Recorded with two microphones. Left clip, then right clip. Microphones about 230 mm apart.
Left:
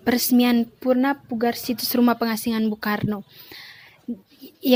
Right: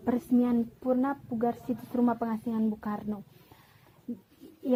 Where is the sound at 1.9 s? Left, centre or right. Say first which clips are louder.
Left 8 dB; left.